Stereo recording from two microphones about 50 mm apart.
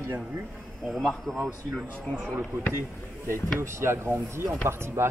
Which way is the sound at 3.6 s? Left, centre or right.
Right.